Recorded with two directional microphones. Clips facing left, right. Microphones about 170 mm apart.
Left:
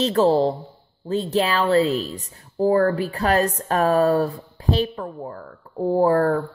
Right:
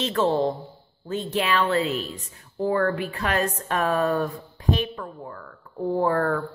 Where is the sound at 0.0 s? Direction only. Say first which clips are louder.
Left 5 dB; 35° left (ahead or behind).